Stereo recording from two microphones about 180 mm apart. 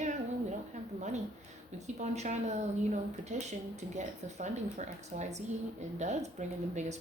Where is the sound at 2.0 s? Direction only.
40° right (ahead or behind).